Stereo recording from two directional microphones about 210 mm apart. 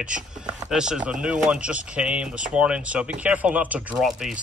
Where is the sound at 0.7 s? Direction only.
5° right (ahead or behind).